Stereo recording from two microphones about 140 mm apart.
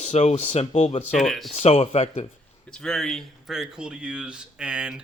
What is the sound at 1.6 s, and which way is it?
Speech, 45° left (ahead or behind).